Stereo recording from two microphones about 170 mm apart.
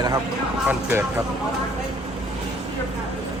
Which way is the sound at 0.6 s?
10° right (ahead or behind).